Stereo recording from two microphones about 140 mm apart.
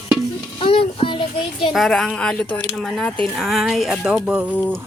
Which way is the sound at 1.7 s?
Centre (ahead or behind).